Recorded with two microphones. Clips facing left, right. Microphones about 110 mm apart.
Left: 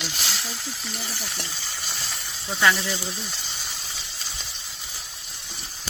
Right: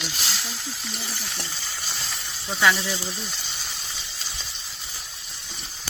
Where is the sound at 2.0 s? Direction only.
Centre (ahead or behind).